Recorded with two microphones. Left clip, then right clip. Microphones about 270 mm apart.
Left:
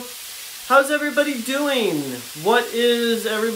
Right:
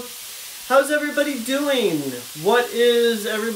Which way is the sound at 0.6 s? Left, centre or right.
Centre.